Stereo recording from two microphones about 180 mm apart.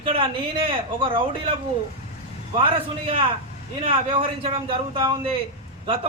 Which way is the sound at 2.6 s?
30° right (ahead or behind).